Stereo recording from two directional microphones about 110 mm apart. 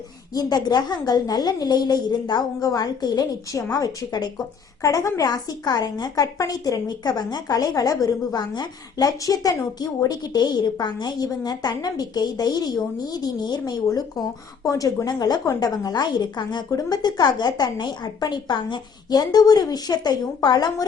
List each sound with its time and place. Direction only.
0.3 s a woman's voice: 35° left (ahead or behind)